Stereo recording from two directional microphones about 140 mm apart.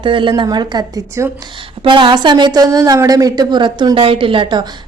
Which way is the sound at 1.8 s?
35° right (ahead or behind).